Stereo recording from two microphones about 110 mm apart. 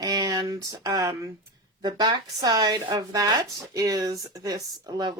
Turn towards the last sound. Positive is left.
turn(degrees=-35)  # may be behind; listen again after turning